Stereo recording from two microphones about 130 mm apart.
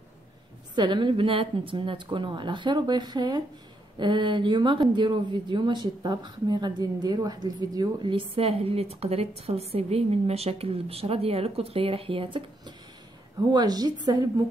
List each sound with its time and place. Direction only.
0.7 s speech: 35° right (ahead or behind)